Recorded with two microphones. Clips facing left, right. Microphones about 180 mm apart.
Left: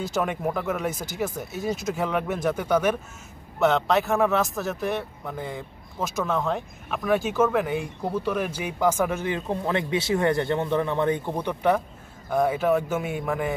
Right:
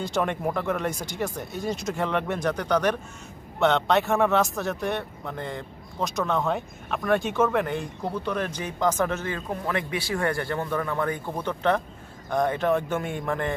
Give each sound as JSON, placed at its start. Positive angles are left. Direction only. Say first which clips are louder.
{"t": 0.0, "sound": "speech", "louder": "even", "side_deg": 5}
{"t": 9.5, "sound": "speech", "louder": "left 3 dB", "side_deg": 25}